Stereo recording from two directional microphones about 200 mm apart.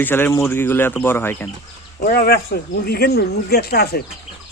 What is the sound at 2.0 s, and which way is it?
Speech, 45° left (ahead or behind).